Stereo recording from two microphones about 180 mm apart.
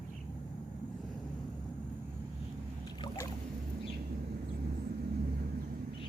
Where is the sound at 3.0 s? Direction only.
15° left (ahead or behind).